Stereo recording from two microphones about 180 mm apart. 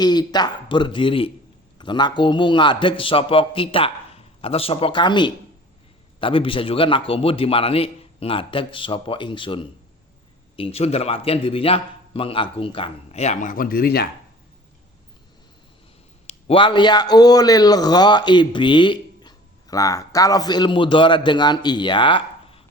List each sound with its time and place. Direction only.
0.0 s a man's voice: 20° left (ahead or behind); by 14.1 s 60° left (ahead or behind)
16.2 s a man's voice: 30° left (ahead or behind)